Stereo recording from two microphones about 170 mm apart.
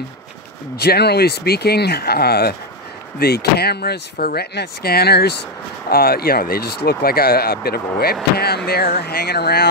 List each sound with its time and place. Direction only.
0.7 s speech: 70° left (ahead or behind)